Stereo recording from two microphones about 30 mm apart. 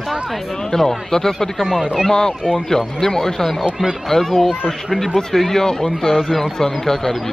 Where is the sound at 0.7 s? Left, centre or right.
Centre.